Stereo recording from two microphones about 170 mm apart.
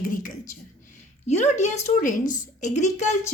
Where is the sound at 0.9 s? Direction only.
40° left (ahead or behind).